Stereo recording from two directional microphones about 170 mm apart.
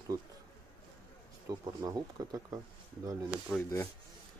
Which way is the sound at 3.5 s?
5° left (ahead or behind).